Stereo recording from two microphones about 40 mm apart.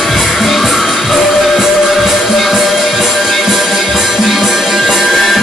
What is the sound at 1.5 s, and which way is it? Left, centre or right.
Music, centre.